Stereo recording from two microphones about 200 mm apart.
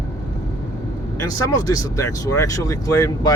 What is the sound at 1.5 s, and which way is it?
Speech, 15° left (ahead or behind).